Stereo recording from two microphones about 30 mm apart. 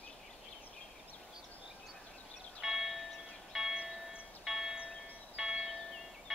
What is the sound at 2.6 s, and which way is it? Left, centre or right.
Music, centre.